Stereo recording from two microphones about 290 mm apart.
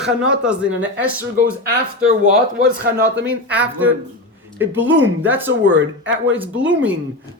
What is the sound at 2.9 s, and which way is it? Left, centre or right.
Speech, right.